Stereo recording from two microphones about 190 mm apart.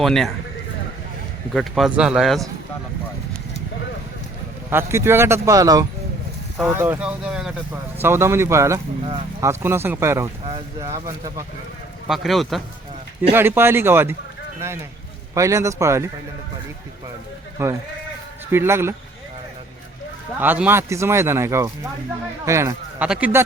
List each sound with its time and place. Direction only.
0.0 s speech: centre (ahead or behind)
1.5 s speech: centre (ahead or behind)
4.7 s speech: 15° right (ahead or behind)
8.0 s speech: 15° right (ahead or behind)
12.0 s speech: centre (ahead or behind)
13.3 s speech: 10° right (ahead or behind)
15.4 s speech: 15° right (ahead or behind)
17.6 s speech: 15° right (ahead or behind)
20.4 s speech: 10° right (ahead or behind)